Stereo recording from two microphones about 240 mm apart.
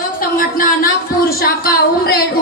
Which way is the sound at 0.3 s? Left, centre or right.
Left.